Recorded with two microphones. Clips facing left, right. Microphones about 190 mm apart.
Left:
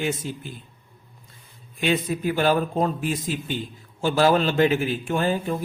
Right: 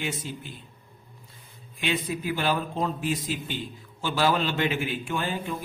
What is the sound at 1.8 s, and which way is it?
A man's voice, 45° left (ahead or behind).